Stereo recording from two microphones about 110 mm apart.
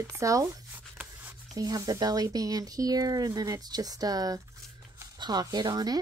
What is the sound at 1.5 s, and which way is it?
Speech, 35° right (ahead or behind).